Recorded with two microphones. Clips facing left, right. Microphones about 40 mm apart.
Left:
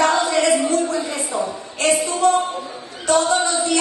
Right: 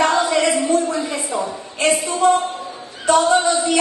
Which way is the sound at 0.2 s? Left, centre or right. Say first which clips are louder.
Even; right.